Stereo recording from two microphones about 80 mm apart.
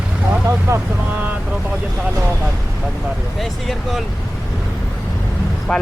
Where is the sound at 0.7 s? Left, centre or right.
Right.